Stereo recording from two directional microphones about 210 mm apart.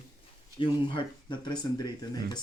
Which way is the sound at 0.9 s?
20° left (ahead or behind).